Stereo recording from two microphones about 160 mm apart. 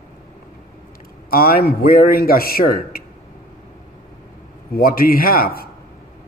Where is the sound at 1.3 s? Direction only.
70° left (ahead or behind).